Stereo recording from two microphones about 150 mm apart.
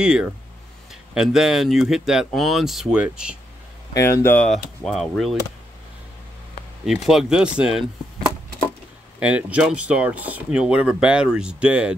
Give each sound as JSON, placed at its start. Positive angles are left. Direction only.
{"t": 0.0, "sound": "speech", "side_deg": -5}
{"t": 3.9, "sound": "speech", "side_deg": 15}
{"t": 4.5, "sound": "speech", "side_deg": 0}
{"t": 6.9, "sound": "speech", "side_deg": 0}
{"t": 9.2, "sound": "speech", "side_deg": -10}